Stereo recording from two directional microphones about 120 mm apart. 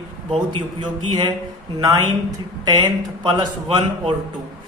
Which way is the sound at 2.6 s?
35° right (ahead or behind).